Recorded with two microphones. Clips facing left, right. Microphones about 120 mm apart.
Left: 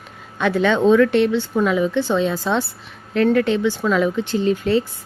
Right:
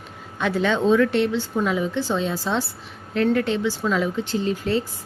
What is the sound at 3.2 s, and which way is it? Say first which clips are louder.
A woman's voice: left 4 dB; 75° left (ahead or behind).